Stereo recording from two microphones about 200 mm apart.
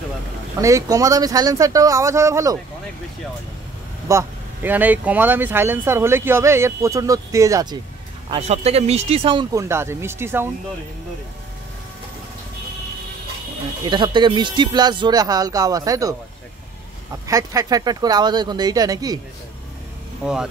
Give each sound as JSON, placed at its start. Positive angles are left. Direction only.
{"t": 0.6, "sound": "speech", "side_deg": -15}
{"t": 4.1, "sound": "speech", "side_deg": -10}
{"t": 8.3, "sound": "speech", "side_deg": -30}
{"t": 13.8, "sound": "speech", "side_deg": -20}
{"t": 20.2, "sound": "speech", "side_deg": -5}